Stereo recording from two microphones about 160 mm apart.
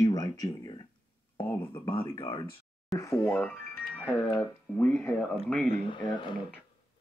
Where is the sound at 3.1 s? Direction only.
10° left (ahead or behind).